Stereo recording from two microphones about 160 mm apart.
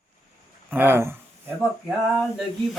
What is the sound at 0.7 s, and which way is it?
Speech, 15° right (ahead or behind).